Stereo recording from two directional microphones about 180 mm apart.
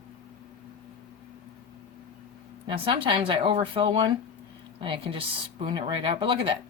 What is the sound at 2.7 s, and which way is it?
A woman's voice, 30° right (ahead or behind).